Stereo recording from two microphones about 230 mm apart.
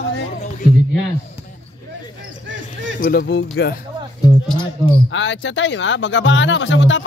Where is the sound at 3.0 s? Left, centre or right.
Left.